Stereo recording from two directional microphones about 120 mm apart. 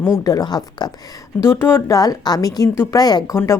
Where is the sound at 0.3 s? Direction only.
35° left (ahead or behind).